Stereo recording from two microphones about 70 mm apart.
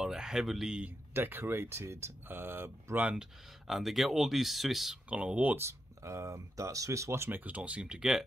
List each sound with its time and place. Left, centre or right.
0.0 s speech: centre
1.1 s speech: right
3.0 s speech: centre
3.6 s speech: centre
5.1 s speech: centre
5.6 s speech: right
7.3 s speech: right